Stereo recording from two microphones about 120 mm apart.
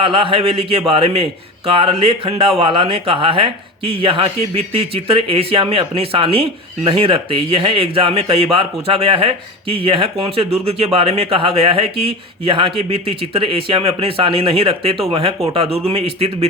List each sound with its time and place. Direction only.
0.0 s speech: 50° right (ahead or behind)